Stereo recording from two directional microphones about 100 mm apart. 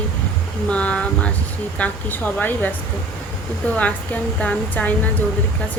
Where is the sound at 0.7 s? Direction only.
10° left (ahead or behind).